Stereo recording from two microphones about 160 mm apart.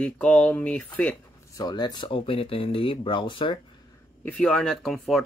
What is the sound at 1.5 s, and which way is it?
Speech, 25° left (ahead or behind).